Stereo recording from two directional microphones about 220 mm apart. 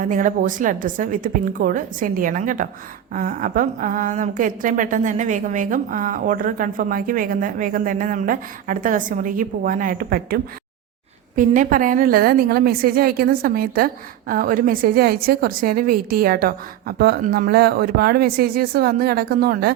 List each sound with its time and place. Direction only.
0.0 s a woman's voice: 35° right (ahead or behind)